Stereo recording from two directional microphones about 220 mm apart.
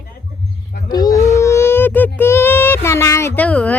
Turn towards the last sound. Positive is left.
turn(degrees=5)  # may be behind; listen again after turning